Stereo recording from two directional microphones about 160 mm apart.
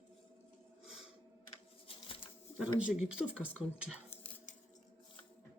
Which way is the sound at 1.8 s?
35° left (ahead or behind).